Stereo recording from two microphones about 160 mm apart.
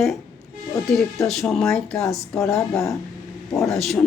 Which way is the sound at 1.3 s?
Centre (ahead or behind).